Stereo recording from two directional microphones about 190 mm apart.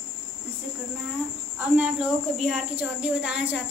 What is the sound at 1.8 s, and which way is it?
Speech, 5° right (ahead or behind).